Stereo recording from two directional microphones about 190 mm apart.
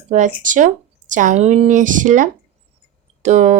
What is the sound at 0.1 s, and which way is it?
Speech, 40° right (ahead or behind).